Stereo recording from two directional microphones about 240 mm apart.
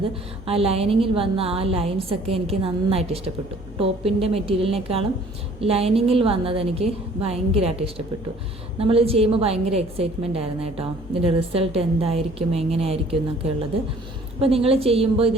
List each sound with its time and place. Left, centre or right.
0.4 s a woman's voice: right